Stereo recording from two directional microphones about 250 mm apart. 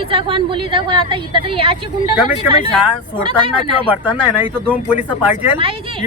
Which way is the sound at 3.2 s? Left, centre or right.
Centre.